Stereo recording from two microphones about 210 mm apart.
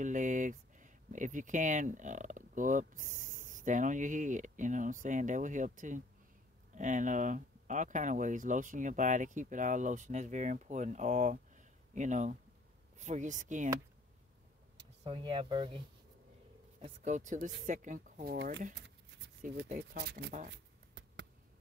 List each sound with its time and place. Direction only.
0.0 s speech: 35° right (ahead or behind)
15.0 s speech: 25° right (ahead or behind)
16.8 s speech: 35° right (ahead or behind); by 18.6 s 50° right (ahead or behind)
18.8 s a sound: 55° right (ahead or behind)
19.8 s speech: 50° right (ahead or behind)
20.4 s a sound: 55° right (ahead or behind)